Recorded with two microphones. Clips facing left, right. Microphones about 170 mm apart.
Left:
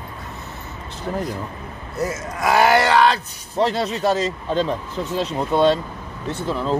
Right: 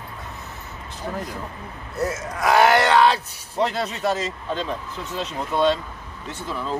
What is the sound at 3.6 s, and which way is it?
Speech, 30° left (ahead or behind).